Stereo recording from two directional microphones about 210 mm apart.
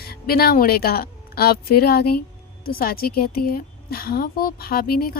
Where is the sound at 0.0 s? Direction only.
45° left (ahead or behind).